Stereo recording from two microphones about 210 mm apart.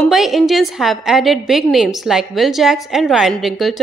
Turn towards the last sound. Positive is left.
turn(degrees=0)  # may be behind; listen again after turning